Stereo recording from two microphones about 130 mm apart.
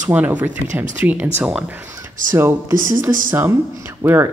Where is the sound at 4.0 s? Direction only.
20° right (ahead or behind).